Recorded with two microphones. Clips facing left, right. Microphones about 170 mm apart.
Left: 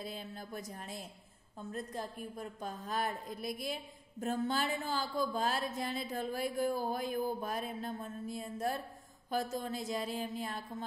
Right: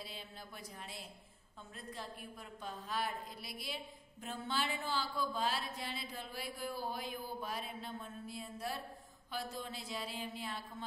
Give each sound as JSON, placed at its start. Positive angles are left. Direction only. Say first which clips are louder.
{"t": 0.0, "sound": "a woman's voice", "louder": "left 6 dB", "side_deg": 45}